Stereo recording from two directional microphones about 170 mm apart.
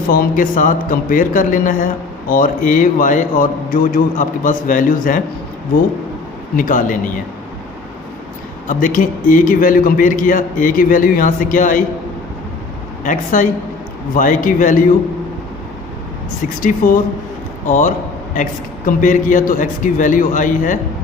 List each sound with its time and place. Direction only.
0.1 s a man's voice: 55° left (ahead or behind)
6.6 s a man's voice: 50° left (ahead or behind)
8.6 s a man's voice: 50° left (ahead or behind)
13.1 s a man's voice: 50° left (ahead or behind)
16.6 s a man's voice: 55° left (ahead or behind)